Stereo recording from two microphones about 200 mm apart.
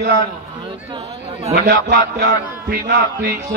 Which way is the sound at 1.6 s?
55° right (ahead or behind).